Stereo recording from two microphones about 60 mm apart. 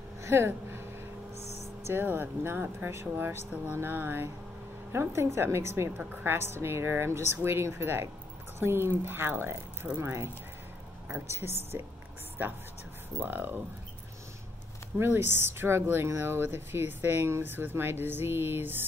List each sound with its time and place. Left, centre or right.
0.2 s a sound: right
2.0 s speech: right
4.9 s speech: right
5.9 s a woman's voice: right
6.3 s speech: right
12.4 s speech: right
15.0 s speech: right